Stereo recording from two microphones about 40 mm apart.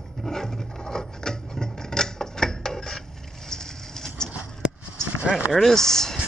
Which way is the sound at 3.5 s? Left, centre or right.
Centre.